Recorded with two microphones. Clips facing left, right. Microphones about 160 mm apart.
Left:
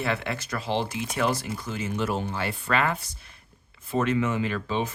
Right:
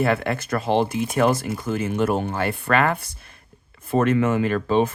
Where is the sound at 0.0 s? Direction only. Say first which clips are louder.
Right 7 dB; 50° right (ahead or behind).